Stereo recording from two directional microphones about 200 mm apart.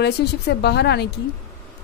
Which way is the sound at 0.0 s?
55° left (ahead or behind).